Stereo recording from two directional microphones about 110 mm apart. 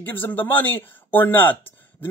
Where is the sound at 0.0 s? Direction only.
15° left (ahead or behind).